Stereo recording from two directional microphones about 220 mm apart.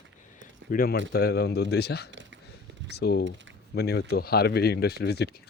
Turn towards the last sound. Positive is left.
turn(degrees=45)  # may be behind; listen again after turning